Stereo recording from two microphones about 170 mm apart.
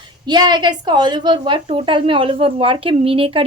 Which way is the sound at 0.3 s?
25° right (ahead or behind).